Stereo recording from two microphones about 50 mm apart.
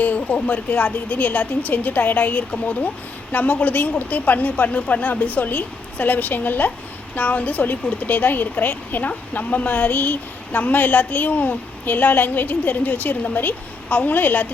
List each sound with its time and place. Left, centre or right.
0.0 s a woman's voice: left
8.9 s a woman's voice: left